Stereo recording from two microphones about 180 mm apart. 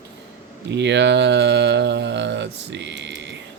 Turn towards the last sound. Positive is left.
turn(degrees=-80)